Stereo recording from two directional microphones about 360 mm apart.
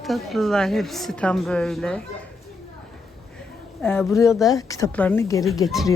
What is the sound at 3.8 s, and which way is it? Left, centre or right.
Speech, centre.